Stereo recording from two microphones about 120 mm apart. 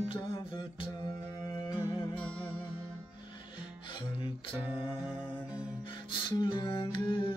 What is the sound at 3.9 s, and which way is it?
Music, 40° left (ahead or behind).